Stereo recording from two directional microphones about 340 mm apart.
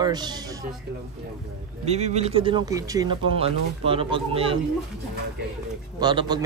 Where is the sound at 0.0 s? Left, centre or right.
Centre.